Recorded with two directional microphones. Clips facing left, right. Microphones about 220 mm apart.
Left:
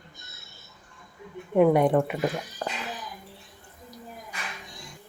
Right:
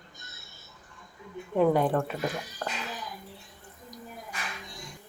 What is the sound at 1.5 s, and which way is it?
Speech, 15° left (ahead or behind).